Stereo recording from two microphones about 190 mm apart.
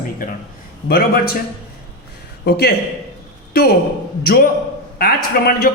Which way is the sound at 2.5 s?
60° left (ahead or behind).